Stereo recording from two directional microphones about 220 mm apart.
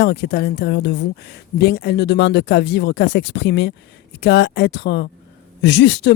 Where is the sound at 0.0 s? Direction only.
50° left (ahead or behind).